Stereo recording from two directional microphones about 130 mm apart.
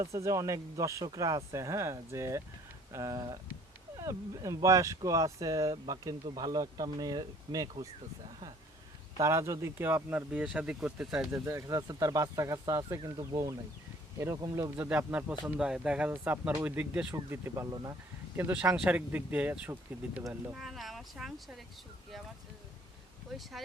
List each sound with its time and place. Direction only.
0.0 s speech: 25° right (ahead or behind)
9.2 s speech: 20° right (ahead or behind); by 11.3 s 5° right (ahead or behind)
11.3 s speech: 20° right (ahead or behind)
14.8 s speech: 10° right (ahead or behind)
18.8 s speech: 15° right (ahead or behind)
20.5 s speech: centre (ahead or behind)
23.3 s speech: centre (ahead or behind)